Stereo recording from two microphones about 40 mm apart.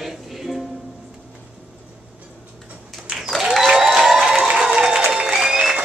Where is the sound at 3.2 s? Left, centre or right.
Centre.